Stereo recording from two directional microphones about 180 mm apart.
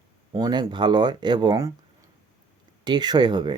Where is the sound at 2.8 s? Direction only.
25° right (ahead or behind).